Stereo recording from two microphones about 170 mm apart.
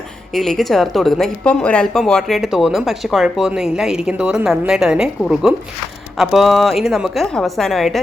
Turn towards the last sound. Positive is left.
turn(degrees=0)  # may be behind; listen again after turning